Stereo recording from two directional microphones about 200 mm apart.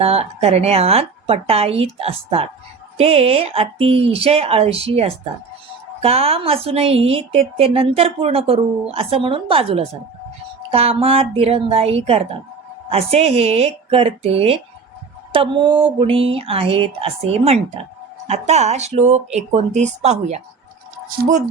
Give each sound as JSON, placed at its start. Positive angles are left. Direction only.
{"t": 0.0, "sound": "a woman's voice", "side_deg": -30}